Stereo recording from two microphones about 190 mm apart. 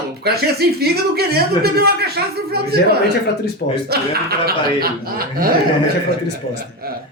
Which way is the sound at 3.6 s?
45° left (ahead or behind).